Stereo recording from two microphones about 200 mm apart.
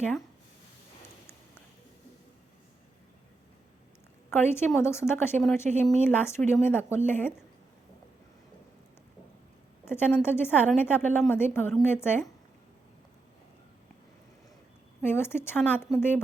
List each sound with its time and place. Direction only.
4.3 s speech: 10° left (ahead or behind)
9.8 s a woman's voice: 10° left (ahead or behind)
15.0 s speech: 10° left (ahead or behind)